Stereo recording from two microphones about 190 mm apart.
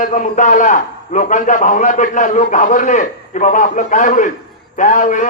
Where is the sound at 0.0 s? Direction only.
45° left (ahead or behind).